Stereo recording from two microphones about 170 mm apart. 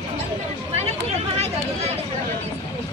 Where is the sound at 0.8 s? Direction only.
40° right (ahead or behind).